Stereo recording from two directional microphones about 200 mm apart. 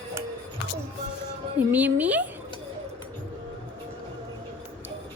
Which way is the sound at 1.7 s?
10° right (ahead or behind).